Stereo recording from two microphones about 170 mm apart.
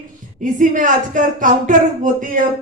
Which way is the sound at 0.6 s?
50° right (ahead or behind).